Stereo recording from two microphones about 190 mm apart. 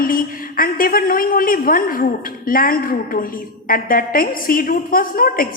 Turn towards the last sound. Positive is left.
turn(degrees=50)  # may be behind; listen again after turning